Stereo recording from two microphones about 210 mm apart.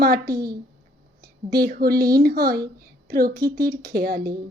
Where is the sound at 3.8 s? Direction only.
45° right (ahead or behind).